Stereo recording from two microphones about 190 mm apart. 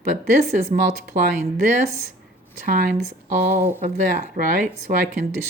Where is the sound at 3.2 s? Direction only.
45° right (ahead or behind).